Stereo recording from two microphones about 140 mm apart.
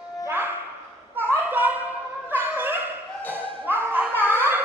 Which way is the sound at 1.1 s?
15° right (ahead or behind).